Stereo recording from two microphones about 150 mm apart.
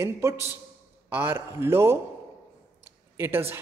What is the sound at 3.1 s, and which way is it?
Speech, 15° right (ahead or behind).